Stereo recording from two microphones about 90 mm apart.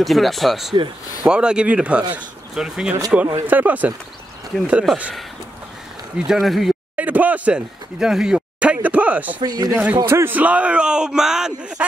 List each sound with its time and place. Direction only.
0.0 s speech: centre (ahead or behind); by 3.9 s 15° right (ahead or behind)
4.9 s speech: 5° left (ahead or behind)
6.1 s speech: 5° right (ahead or behind)
7.0 s speech: 15° right (ahead or behind)
9.4 s speech: 50° right (ahead or behind)
9.7 s speech: 15° right (ahead or behind)
10.0 s speech: 25° right (ahead or behind); by 11.8 s 5° right (ahead or behind)